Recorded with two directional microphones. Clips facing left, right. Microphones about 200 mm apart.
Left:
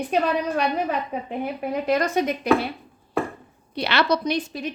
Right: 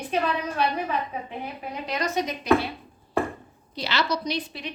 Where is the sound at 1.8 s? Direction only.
50° left (ahead or behind).